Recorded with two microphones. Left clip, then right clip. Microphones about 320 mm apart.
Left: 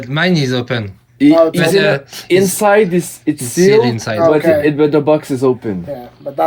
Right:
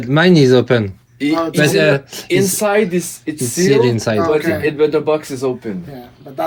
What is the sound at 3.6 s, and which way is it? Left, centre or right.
Speech, centre.